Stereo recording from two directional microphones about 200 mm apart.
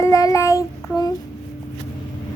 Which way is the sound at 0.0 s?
15° left (ahead or behind).